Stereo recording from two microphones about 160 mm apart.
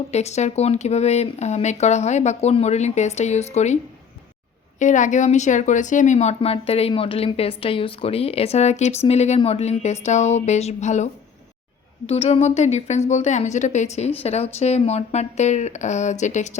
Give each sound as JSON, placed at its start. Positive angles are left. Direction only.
{"t": 0.1, "sound": "a woman's voice", "side_deg": 45}
{"t": 4.8, "sound": "a woman's voice", "side_deg": 50}